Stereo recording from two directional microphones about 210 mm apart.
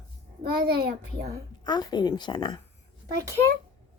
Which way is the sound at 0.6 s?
45° right (ahead or behind).